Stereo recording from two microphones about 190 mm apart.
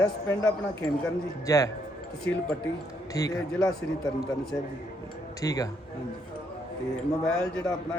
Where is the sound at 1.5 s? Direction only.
20° left (ahead or behind).